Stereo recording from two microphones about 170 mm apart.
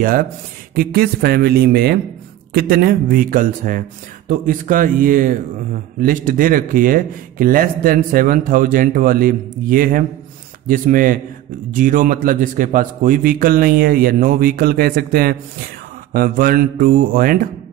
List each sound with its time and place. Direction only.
0.7 s speech: 65° right (ahead or behind)